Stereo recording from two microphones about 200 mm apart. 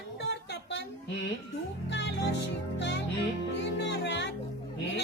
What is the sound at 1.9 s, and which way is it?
Music, 65° left (ahead or behind).